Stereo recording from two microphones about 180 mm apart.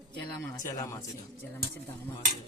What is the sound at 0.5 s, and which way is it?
Speech, 20° left (ahead or behind).